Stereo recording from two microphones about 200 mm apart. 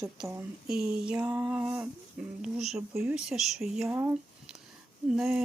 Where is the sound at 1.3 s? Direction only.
20° right (ahead or behind).